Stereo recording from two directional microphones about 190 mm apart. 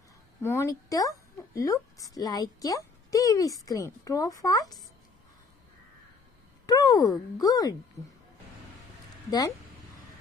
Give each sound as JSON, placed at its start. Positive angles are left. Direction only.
{"t": 0.4, "sound": "a woman's voice", "side_deg": 15}
{"t": 6.6, "sound": "a sound", "side_deg": 20}
{"t": 7.3, "sound": "speech", "side_deg": 20}